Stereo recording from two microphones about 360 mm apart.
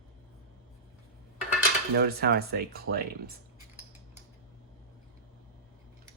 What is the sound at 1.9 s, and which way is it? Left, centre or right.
Speech, right.